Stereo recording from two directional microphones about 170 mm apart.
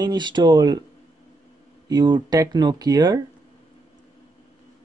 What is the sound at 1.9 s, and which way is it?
Speech, 25° right (ahead or behind).